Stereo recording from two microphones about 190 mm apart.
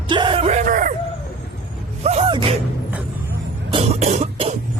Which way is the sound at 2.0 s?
35° right (ahead or behind).